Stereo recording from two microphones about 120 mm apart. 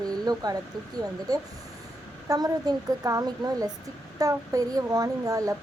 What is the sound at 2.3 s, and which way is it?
Speech, 30° right (ahead or behind).